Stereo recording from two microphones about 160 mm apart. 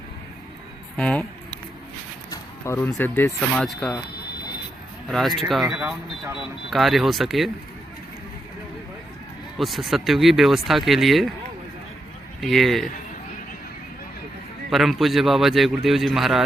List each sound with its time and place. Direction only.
0.9 s speech: 5° left (ahead or behind)
2.3 s a sound: 15° left (ahead or behind)
3.0 s speech: 15° left (ahead or behind)
5.0 s speech: centre (ahead or behind)
9.6 s speech: centre (ahead or behind)
12.4 s speech: centre (ahead or behind)
14.7 s speech: centre (ahead or behind)